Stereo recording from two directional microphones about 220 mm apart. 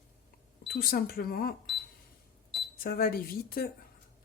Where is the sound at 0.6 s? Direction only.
45° left (ahead or behind).